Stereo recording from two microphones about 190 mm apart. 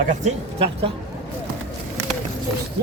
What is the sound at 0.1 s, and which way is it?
Speech, 30° right (ahead or behind).